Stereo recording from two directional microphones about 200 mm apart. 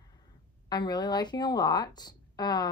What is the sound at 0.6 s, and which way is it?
Speech, 20° left (ahead or behind).